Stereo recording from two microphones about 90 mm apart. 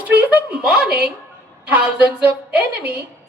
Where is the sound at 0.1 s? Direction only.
10° right (ahead or behind).